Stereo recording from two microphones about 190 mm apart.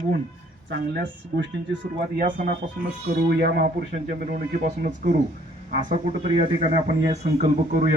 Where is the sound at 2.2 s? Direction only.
45° right (ahead or behind).